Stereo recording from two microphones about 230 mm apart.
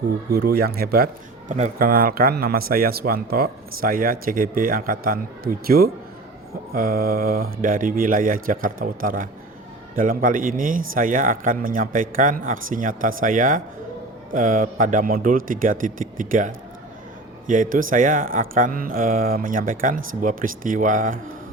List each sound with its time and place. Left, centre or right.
0.3 s speech: right